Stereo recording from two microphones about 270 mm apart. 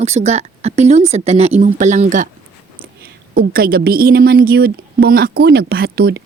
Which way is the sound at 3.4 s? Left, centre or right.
Right.